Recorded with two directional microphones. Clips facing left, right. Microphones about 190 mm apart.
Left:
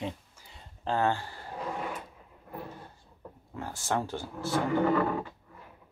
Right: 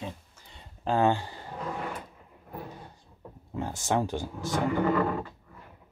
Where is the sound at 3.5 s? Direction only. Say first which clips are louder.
Right 4 dB; 20° right (ahead or behind).